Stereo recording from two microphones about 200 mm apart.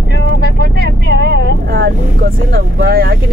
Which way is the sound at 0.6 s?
50° right (ahead or behind).